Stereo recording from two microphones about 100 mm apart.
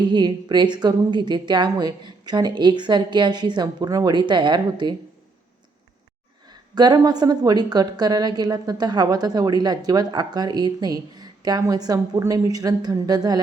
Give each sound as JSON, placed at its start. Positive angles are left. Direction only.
{"t": 0.0, "sound": "a woman's voice", "side_deg": -50}
{"t": 6.5, "sound": "a woman's voice", "side_deg": -45}